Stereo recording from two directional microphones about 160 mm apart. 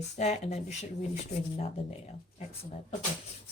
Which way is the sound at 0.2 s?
45° left (ahead or behind).